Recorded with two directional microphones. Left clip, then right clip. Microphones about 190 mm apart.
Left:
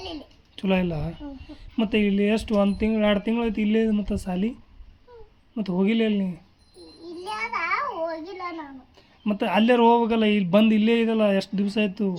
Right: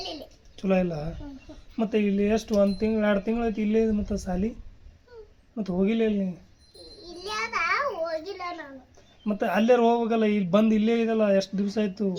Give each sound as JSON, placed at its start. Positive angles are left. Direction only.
{"t": 0.5, "sound": "a man's voice", "side_deg": 30}
{"t": 5.5, "sound": "a man's voice", "side_deg": 35}
{"t": 7.3, "sound": "child singing", "side_deg": 10}
{"t": 9.0, "sound": "a sound", "side_deg": 35}
{"t": 9.6, "sound": "a man's voice", "side_deg": 35}